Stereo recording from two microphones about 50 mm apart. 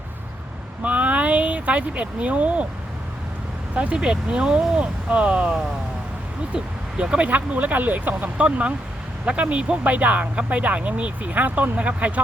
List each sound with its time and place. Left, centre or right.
0.8 s speech: right
3.8 s speech: right
7.0 s speech: right
7.3 s speech: right
8.4 s speech: right